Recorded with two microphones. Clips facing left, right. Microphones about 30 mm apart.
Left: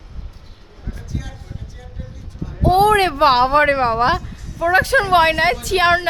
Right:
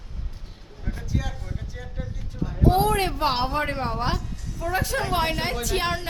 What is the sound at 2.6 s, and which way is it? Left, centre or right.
A woman's voice, left.